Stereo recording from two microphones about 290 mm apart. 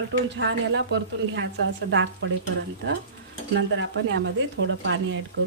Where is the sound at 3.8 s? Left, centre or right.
Right.